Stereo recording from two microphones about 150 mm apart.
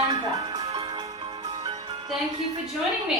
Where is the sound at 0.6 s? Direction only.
40° right (ahead or behind).